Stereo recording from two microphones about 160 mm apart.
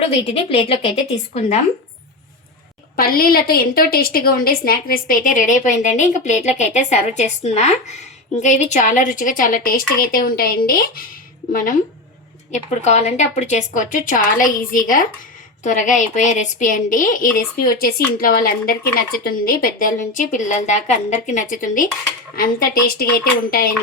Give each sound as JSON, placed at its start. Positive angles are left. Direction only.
{"t": 0.3, "sound": "a woman's voice", "side_deg": 40}
{"t": 2.9, "sound": "a woman's voice", "side_deg": 65}
{"t": 11.5, "sound": "a woman's voice", "side_deg": 55}
{"t": 12.5, "sound": "a woman's voice", "side_deg": 45}
{"t": 22.4, "sound": "speech", "side_deg": 65}